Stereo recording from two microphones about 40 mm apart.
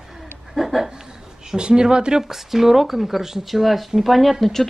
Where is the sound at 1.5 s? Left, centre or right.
Centre.